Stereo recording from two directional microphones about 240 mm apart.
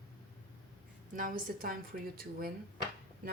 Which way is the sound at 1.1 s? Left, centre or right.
Right.